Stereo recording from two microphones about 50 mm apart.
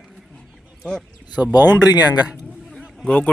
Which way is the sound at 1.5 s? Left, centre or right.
Right.